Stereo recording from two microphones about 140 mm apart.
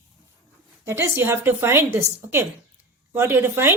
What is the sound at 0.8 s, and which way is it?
A woman's voice, 20° right (ahead or behind).